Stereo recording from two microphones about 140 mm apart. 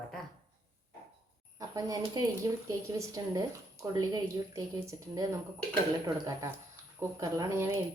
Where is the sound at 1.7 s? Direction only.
25° right (ahead or behind).